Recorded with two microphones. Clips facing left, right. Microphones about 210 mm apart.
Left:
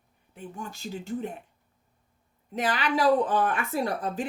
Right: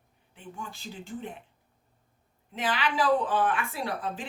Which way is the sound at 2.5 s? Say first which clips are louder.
Left 2 dB; 40° left (ahead or behind).